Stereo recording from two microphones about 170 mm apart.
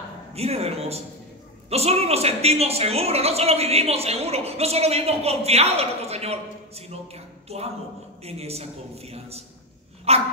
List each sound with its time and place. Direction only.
0.3 s a woman's voice: 35° right (ahead or behind)
7.4 s a woman's voice: 35° right (ahead or behind)